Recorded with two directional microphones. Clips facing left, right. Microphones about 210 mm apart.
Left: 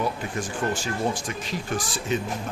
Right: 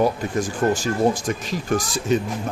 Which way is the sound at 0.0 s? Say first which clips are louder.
Right 7 dB; 40° right (ahead or behind).